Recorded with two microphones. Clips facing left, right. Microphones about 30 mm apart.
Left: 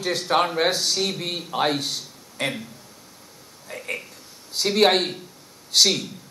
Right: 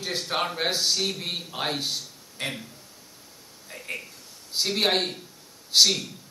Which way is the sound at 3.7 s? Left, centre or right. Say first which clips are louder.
Left 5 dB; centre.